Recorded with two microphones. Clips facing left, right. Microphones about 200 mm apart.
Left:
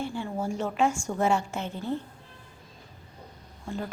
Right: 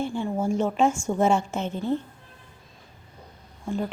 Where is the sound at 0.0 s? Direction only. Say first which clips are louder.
Right 5 dB; 20° right (ahead or behind).